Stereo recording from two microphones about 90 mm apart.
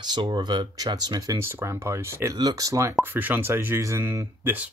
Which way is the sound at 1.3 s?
30° right (ahead or behind).